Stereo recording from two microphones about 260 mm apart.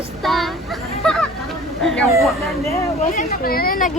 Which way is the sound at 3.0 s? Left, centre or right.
Left.